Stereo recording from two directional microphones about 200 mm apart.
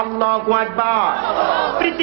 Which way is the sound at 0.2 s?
20° right (ahead or behind).